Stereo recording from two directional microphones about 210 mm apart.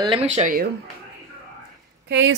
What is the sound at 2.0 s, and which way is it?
Speech, 65° right (ahead or behind).